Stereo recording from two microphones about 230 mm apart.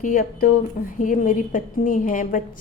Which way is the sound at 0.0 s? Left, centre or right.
Left.